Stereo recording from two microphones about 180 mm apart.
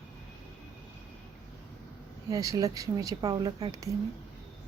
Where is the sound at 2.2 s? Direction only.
20° right (ahead or behind).